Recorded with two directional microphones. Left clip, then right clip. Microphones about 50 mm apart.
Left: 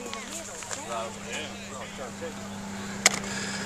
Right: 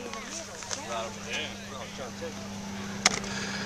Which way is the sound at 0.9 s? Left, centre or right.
Right.